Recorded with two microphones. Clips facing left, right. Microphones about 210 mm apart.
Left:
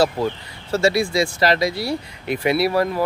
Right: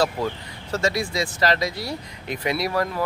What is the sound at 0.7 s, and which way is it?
Speech, 10° left (ahead or behind).